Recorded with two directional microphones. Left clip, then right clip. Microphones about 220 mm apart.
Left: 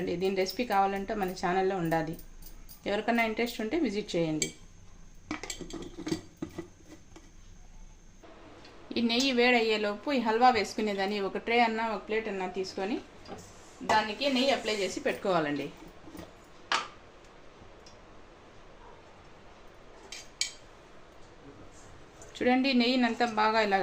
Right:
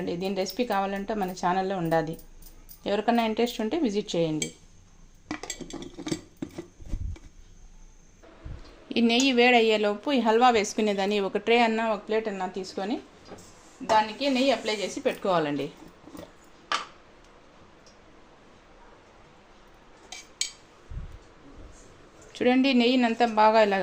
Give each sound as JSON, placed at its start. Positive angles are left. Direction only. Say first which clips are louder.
{"t": 0.0, "sound": "speech", "louder": "even", "side_deg": -25}
{"t": 8.9, "sound": "a woman's voice", "louder": "right 5 dB", "side_deg": -40}
{"t": 14.2, "sound": "speech", "louder": "right 3 dB", "side_deg": -30}
{"t": 22.4, "sound": "a woman's voice", "louder": "right 4 dB", "side_deg": -35}